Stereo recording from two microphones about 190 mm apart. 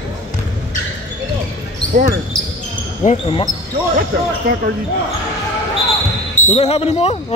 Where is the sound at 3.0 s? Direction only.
35° left (ahead or behind).